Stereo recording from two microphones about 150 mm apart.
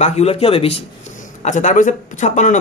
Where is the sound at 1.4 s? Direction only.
55° left (ahead or behind).